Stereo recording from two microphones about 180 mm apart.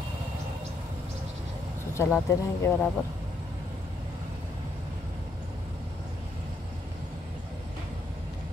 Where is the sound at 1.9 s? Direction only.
15° left (ahead or behind).